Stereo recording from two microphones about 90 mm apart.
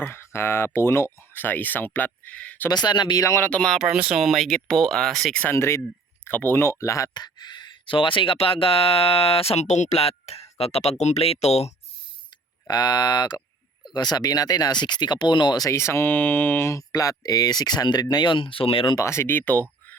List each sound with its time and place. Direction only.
0.0 s speech: 25° left (ahead or behind)
2.6 s speech: 50° left (ahead or behind)
3.2 s speech: 30° left (ahead or behind)
3.5 s speech: 10° left (ahead or behind)
3.9 s speech: 10° right (ahead or behind)
4.2 s speech: centre (ahead or behind)
5.4 s speech: 25° left (ahead or behind)
7.1 s speech: 50° left (ahead or behind); by 9.6 s 90° left
10.6 s speech: 90° left
12.6 s speech: 55° left (ahead or behind)
15.7 s speech: 30° left (ahead or behind)
16.9 s speech: 40° left (ahead or behind); by 18.9 s 85° left
18.9 s speech: 30° left (ahead or behind)